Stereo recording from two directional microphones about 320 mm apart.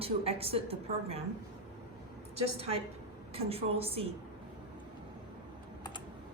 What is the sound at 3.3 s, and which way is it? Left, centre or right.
Speech, centre.